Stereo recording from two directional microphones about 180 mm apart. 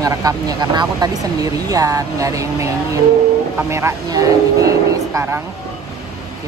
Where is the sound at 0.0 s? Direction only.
20° right (ahead or behind).